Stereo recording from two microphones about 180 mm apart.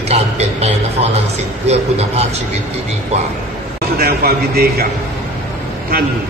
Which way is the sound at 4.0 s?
55° right (ahead or behind).